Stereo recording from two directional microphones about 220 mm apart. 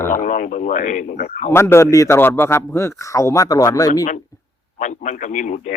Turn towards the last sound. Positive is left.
turn(degrees=35)  # may be behind; listen again after turning